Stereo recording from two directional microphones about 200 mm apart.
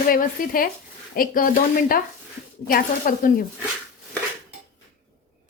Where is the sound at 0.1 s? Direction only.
45° left (ahead or behind).